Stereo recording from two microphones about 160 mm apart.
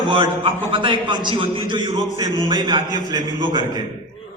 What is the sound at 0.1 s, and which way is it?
A man's voice, 30° right (ahead or behind).